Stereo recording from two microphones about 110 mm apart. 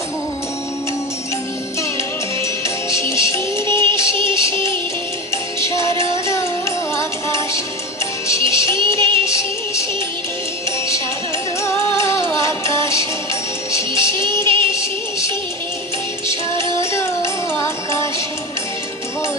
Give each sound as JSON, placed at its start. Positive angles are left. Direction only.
{"t": 2.9, "sound": "music", "side_deg": 25}
{"t": 3.7, "sound": "music", "side_deg": -45}
{"t": 4.3, "sound": "music", "side_deg": 25}
{"t": 8.7, "sound": "music", "side_deg": -45}
{"t": 12.2, "sound": "music", "side_deg": 25}
{"t": 13.9, "sound": "music", "side_deg": -45}
{"t": 14.7, "sound": "music", "side_deg": 25}
{"t": 16.3, "sound": "music", "side_deg": -45}
{"t": 17.6, "sound": "music", "side_deg": 25}